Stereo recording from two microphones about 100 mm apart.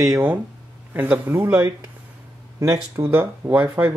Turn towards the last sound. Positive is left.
turn(degrees=-20)  # may be behind; listen again after turning